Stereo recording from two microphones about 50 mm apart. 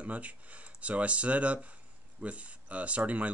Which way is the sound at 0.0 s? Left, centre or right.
Right.